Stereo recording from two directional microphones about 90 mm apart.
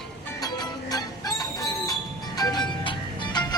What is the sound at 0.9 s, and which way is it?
Music, 45° left (ahead or behind).